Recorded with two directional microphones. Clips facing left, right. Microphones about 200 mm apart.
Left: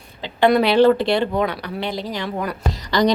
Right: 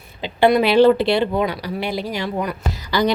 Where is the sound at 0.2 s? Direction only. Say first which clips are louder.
Right 1 dB; 10° right (ahead or behind).